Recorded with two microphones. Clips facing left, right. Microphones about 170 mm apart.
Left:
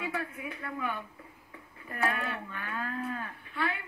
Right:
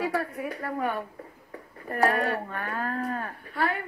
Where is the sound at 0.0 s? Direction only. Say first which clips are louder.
Right 7 dB; 40° right (ahead or behind).